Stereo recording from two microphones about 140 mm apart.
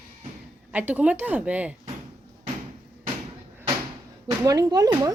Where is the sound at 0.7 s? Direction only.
10° right (ahead or behind).